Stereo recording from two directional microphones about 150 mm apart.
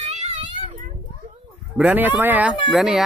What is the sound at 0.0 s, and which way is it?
Children playing, 50° right (ahead or behind).